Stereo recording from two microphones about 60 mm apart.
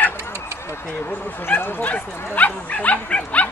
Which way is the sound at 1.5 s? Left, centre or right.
Left.